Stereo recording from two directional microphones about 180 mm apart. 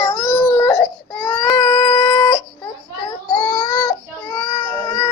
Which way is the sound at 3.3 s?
20° left (ahead or behind).